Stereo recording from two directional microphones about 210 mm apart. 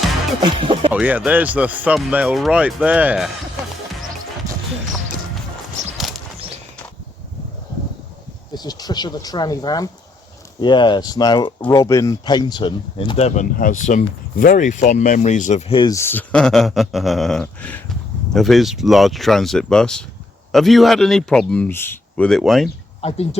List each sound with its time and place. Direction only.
0.4 s speech: 25° right (ahead or behind)
0.9 s speech: 5° right (ahead or behind)
4.4 s music: 15° right (ahead or behind)
8.5 s speech: 20° left (ahead or behind); by 22.7 s centre (ahead or behind)
23.0 s speech: 30° left (ahead or behind)